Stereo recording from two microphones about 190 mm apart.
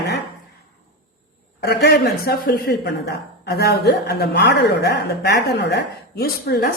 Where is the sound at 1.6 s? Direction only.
55° left (ahead or behind).